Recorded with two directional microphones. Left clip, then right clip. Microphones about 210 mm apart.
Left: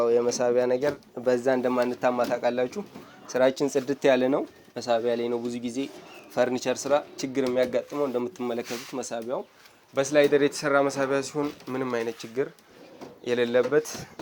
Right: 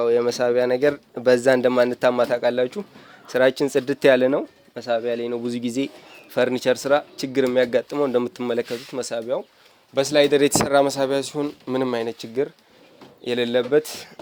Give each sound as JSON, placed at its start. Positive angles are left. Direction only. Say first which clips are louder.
{"t": 0.0, "sound": "speech", "louder": "right 3 dB", "side_deg": -30}
{"t": 4.7, "sound": "speech", "louder": "right 2 dB", "side_deg": -10}
{"t": 5.4, "sound": "speech", "louder": "right 6 dB", "side_deg": -35}